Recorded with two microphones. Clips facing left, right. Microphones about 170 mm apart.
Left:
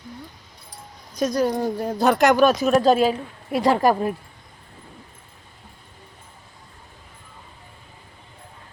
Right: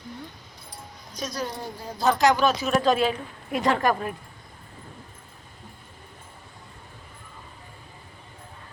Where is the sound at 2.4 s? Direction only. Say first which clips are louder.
Left 6 dB; 45° left (ahead or behind).